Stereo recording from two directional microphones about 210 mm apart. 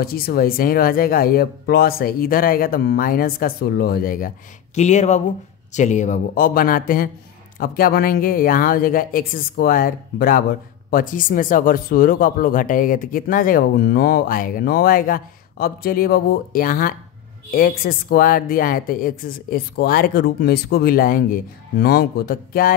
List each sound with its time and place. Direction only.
0.0 s speech: 45° left (ahead or behind)